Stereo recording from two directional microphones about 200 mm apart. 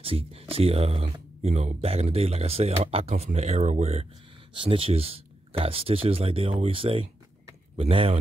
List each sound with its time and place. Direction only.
0.0 s speech: 30° right (ahead or behind)